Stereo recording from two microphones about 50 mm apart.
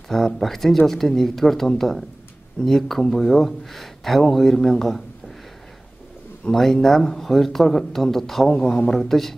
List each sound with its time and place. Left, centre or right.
0.1 s speech: centre
6.5 s speech: centre
8.5 s a man's voice: left
8.9 s speech: centre